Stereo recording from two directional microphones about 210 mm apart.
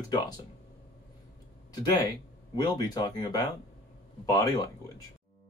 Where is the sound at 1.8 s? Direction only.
20° left (ahead or behind).